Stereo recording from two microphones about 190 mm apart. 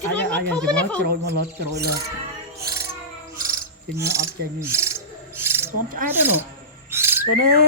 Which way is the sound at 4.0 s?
15° right (ahead or behind).